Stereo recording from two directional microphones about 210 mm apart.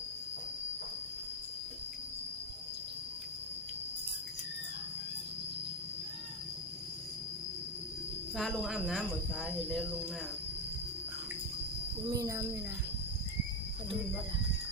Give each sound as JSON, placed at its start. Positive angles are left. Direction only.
{"t": 8.4, "sound": "speech", "side_deg": 0}
{"t": 12.1, "sound": "a child's voice", "side_deg": -15}